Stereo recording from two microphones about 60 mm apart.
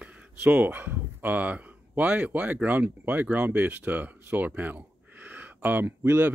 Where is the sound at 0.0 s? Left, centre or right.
Right.